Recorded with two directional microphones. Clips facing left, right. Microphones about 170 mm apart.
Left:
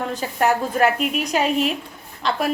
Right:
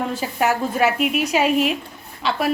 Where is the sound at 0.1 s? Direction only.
5° right (ahead or behind).